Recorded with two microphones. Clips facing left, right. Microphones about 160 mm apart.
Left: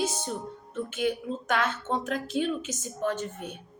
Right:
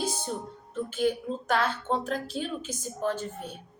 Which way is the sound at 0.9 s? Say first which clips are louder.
Right 2 dB; 35° right (ahead or behind).